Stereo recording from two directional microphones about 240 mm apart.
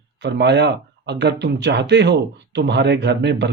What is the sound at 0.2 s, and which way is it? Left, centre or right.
Speech, right.